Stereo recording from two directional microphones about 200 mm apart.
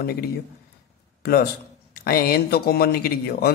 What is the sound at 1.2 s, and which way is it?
Speech, 50° left (ahead or behind).